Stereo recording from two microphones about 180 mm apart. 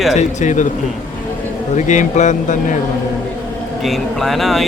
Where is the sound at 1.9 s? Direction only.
40° left (ahead or behind).